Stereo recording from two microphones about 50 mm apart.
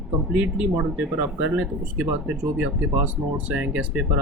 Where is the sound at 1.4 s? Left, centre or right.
Right.